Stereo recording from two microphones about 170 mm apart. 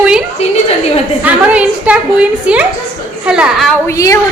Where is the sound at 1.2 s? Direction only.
10° right (ahead or behind).